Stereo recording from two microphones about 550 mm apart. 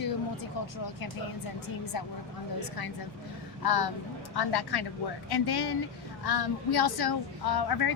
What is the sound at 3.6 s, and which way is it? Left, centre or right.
Speech, left.